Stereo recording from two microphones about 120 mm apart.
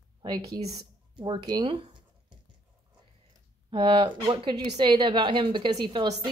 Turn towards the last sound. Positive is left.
turn(degrees=-40)  # may be behind; listen again after turning